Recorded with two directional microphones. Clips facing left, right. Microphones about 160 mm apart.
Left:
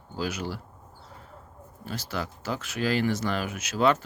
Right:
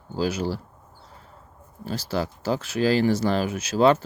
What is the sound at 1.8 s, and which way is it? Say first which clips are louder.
Speech: right 6 dB; 35° right (ahead or behind).